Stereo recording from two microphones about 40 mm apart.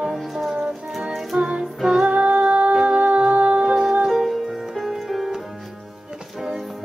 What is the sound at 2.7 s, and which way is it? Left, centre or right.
Music, centre.